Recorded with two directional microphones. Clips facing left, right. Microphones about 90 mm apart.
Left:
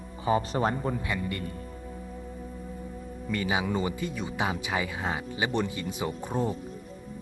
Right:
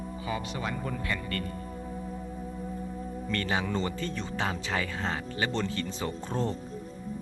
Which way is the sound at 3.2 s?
10° left (ahead or behind).